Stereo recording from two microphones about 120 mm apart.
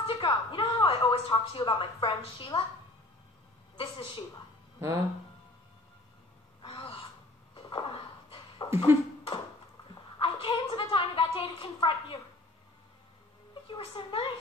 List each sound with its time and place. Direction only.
0.0 s a woman's voice: 45° left (ahead or behind)
3.7 s a woman's voice: 45° left (ahead or behind)
6.6 s gasp: 45° left (ahead or behind)
7.5 s a sound: 45° left (ahead or behind)
8.6 s speech: 20° right (ahead or behind)
10.1 s a sound: 45° left (ahead or behind)
13.7 s a woman's voice: 45° left (ahead or behind)